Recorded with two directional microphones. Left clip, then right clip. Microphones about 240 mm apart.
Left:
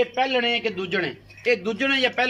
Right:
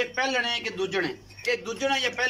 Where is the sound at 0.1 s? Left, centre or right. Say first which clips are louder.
Left 4 dB; left.